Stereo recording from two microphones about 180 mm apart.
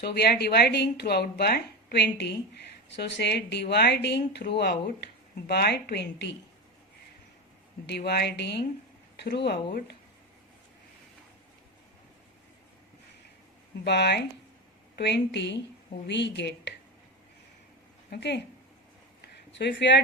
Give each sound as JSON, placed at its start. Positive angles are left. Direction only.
{"t": 0.0, "sound": "a woman's voice", "side_deg": 65}
{"t": 7.9, "sound": "a woman's voice", "side_deg": 65}
{"t": 13.8, "sound": "speech", "side_deg": 70}
{"t": 18.1, "sound": "speech", "side_deg": 70}
{"t": 19.5, "sound": "speech", "side_deg": 75}